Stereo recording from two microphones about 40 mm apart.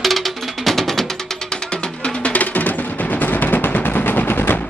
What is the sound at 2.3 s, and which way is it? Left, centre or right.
Music, left.